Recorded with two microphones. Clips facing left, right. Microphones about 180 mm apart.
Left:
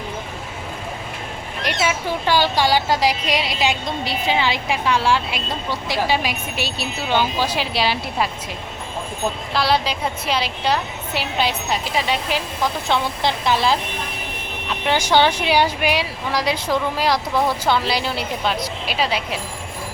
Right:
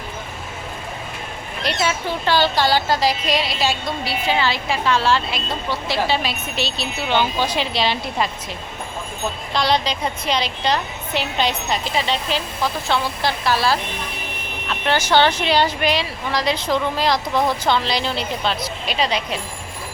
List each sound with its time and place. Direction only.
1.6 s speech: 10° left (ahead or behind)
9.5 s a woman's voice: 5° left (ahead or behind)